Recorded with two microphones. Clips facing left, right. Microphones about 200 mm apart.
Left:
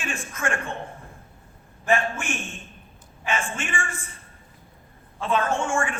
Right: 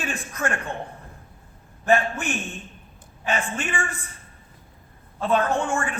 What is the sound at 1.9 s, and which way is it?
A woman's voice, 40° right (ahead or behind).